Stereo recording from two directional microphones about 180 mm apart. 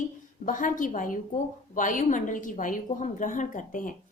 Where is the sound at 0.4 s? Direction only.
45° left (ahead or behind).